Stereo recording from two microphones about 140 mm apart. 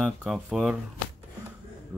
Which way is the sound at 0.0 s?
5° right (ahead or behind).